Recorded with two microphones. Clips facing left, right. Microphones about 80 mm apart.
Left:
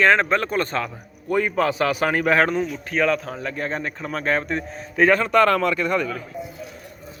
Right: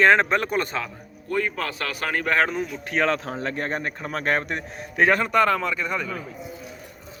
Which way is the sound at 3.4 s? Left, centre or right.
Right.